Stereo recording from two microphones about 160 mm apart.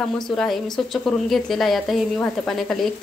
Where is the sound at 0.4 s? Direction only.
Centre (ahead or behind).